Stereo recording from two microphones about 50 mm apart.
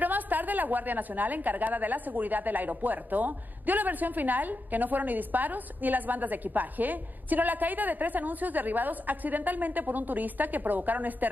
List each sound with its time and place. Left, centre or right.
0.0 s a woman's voice: right